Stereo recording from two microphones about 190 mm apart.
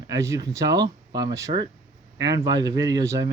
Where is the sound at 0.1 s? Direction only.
15° right (ahead or behind).